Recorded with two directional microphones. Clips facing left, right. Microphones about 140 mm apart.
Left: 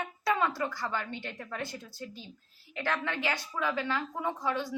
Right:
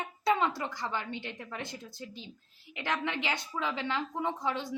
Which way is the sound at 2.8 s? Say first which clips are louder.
Left 1 dB; 20° right (ahead or behind).